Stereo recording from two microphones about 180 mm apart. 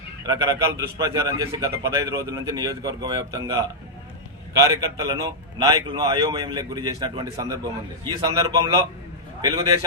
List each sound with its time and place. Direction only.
0.3 s a man's voice: 20° right (ahead or behind)
4.6 s a man's voice: 20° right (ahead or behind)